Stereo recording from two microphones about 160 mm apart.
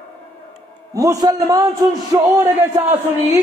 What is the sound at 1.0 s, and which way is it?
A woman's voice, 25° right (ahead or behind).